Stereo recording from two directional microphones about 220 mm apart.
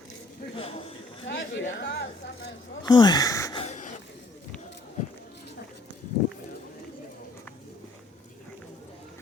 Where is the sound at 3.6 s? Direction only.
35° left (ahead or behind).